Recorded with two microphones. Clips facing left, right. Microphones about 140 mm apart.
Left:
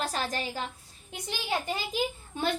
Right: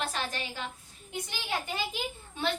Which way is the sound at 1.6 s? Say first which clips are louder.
Left 2 dB; 40° left (ahead or behind).